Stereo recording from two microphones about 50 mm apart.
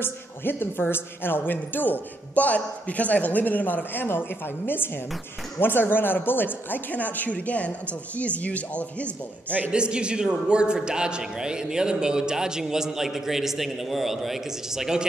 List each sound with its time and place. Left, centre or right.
0.0 s speech: left
9.7 s a man's voice: centre